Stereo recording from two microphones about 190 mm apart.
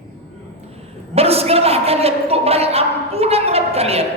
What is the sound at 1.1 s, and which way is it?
Speech, 30° right (ahead or behind).